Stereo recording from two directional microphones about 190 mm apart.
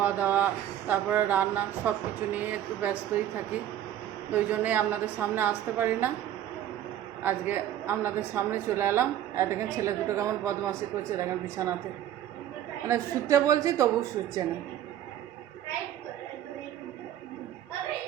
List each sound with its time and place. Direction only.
0.0 s a woman's voice: 10° right (ahead or behind)
4.3 s a woman's voice: 10° right (ahead or behind)
7.2 s a woman's voice: 10° right (ahead or behind)
12.9 s a woman's voice: 15° right (ahead or behind)